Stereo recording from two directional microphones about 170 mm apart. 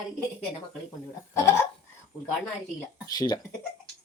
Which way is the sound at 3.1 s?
20° left (ahead or behind).